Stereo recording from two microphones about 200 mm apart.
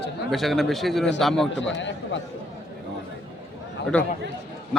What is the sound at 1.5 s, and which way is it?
Speech, 65° left (ahead or behind).